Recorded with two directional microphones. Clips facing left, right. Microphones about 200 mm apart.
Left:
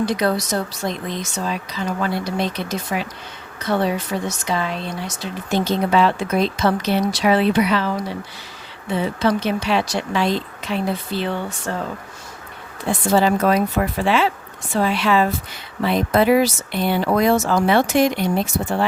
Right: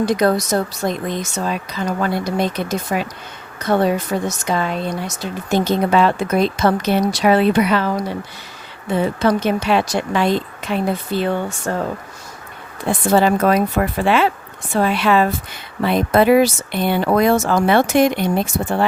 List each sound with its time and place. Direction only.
0.0 s speech: 45° right (ahead or behind)
12.8 s speech: 55° right (ahead or behind)